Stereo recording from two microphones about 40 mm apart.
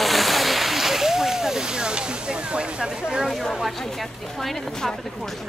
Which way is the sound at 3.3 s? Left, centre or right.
Centre.